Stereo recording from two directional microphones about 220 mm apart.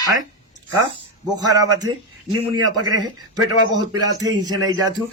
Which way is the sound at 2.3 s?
90° right.